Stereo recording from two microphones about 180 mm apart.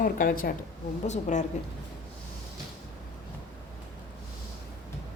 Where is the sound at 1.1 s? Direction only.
40° left (ahead or behind).